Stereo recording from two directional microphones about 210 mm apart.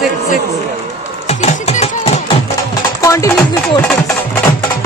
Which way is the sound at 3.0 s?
15° left (ahead or behind).